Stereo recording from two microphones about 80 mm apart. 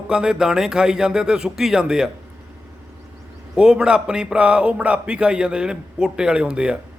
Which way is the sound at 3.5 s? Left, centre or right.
Centre.